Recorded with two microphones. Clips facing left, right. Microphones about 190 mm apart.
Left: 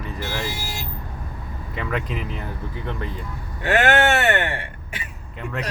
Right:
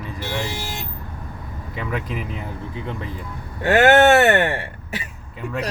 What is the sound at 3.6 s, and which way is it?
Speech, 30° right (ahead or behind).